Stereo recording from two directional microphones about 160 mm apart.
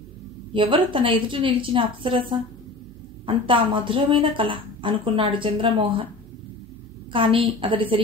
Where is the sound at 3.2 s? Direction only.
30° right (ahead or behind).